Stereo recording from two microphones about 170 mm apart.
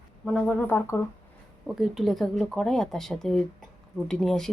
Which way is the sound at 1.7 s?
Centre (ahead or behind).